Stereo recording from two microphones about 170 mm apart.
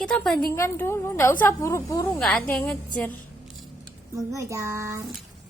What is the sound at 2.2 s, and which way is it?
Speech, 5° left (ahead or behind).